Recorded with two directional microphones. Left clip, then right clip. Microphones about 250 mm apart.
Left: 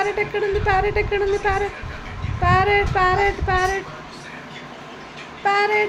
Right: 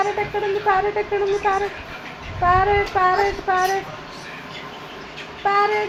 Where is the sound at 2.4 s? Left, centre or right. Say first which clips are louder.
Even; centre.